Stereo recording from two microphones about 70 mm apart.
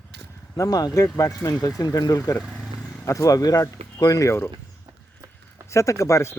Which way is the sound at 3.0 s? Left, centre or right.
Left.